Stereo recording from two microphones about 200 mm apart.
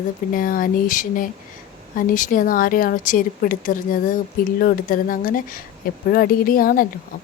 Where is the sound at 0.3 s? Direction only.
45° left (ahead or behind).